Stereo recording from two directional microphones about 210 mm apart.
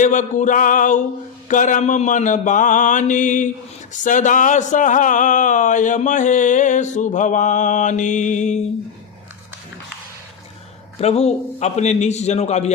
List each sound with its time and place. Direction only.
0.0 s speech: 35° left (ahead or behind)
11.0 s speech: 30° left (ahead or behind)